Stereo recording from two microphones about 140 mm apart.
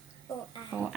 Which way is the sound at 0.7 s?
10° right (ahead or behind).